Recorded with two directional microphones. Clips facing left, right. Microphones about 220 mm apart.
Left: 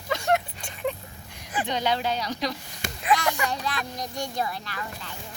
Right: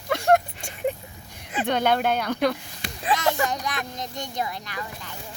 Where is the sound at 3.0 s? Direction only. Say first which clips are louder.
Right 1 dB; 25° right (ahead or behind).